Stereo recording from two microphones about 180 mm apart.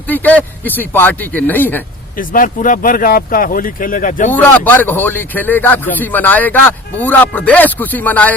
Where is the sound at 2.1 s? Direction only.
50° left (ahead or behind).